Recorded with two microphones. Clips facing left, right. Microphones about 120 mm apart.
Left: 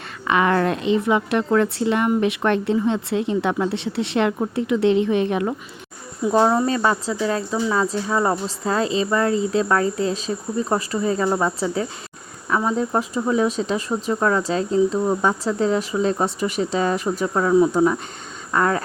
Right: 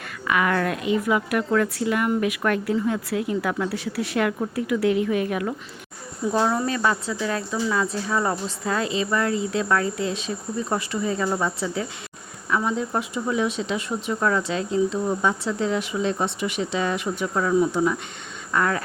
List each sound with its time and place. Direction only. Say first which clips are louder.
0.3 s a woman's voice: left 4 dB; 30° left (ahead or behind)